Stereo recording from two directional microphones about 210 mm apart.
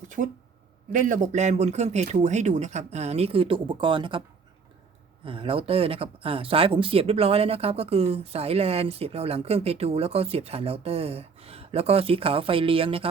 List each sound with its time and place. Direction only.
0.2 s speech: 40° right (ahead or behind); by 4.2 s 25° right (ahead or behind)
5.2 s speech: 25° right (ahead or behind)